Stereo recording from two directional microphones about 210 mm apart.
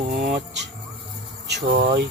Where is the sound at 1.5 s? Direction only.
45° right (ahead or behind).